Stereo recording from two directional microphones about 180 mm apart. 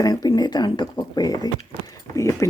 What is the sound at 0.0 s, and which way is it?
Speech, 20° left (ahead or behind).